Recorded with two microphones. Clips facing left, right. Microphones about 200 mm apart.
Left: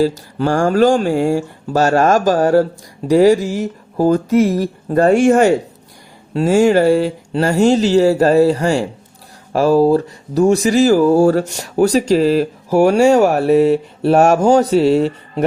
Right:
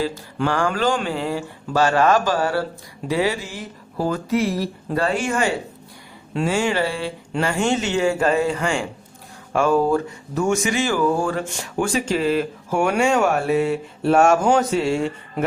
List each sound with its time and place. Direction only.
0.0 s speech: 40° left (ahead or behind)